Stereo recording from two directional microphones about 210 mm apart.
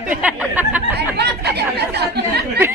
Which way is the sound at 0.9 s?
50° right (ahead or behind).